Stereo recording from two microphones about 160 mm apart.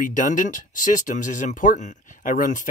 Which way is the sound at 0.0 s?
55° left (ahead or behind).